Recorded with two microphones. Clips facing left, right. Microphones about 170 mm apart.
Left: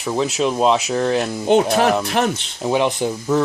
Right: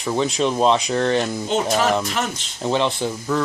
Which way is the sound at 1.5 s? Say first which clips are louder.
Left 5 dB; 55° left (ahead or behind).